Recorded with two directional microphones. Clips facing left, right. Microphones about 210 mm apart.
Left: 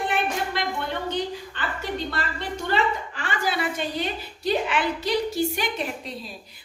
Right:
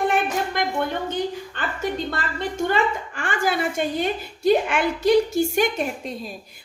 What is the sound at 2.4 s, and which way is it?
A woman's voice, 50° right (ahead or behind).